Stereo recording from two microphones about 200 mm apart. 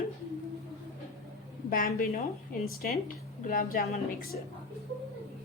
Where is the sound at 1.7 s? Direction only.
45° left (ahead or behind).